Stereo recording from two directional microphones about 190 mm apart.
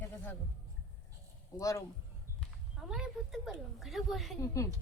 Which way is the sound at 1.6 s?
15° left (ahead or behind).